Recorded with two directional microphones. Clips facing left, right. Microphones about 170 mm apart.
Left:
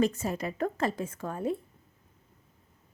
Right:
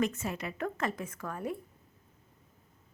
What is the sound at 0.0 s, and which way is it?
A woman's voice, 35° left (ahead or behind).